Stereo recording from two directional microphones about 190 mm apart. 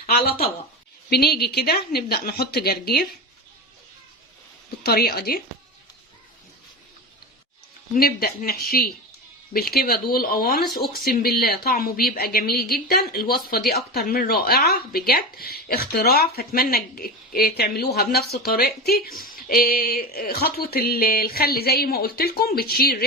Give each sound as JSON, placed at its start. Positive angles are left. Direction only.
{"t": 0.0, "sound": "a woman's voice", "side_deg": 50}
{"t": 4.8, "sound": "speech", "side_deg": 55}
{"t": 7.9, "sound": "speech", "side_deg": 50}